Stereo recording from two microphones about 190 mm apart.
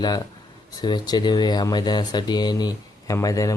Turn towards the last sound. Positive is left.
turn(degrees=15)  # may be behind; listen again after turning